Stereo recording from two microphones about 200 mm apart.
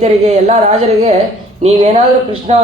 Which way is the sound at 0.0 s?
35° right (ahead or behind).